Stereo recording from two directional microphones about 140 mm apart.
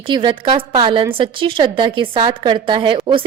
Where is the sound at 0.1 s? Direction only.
35° right (ahead or behind).